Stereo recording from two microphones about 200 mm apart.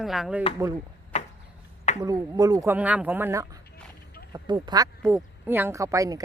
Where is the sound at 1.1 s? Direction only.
35° left (ahead or behind).